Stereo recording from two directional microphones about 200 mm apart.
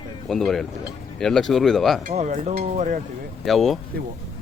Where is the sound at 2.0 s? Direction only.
40° right (ahead or behind).